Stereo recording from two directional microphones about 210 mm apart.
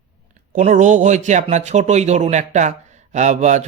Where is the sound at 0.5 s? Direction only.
35° right (ahead or behind).